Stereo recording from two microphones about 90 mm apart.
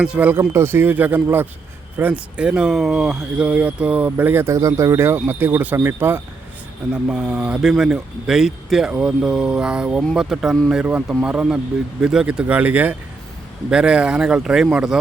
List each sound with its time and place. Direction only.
0.0 s speech: 15° right (ahead or behind)
4.4 s speech: 35° right (ahead or behind)
6.9 s speech: 10° right (ahead or behind)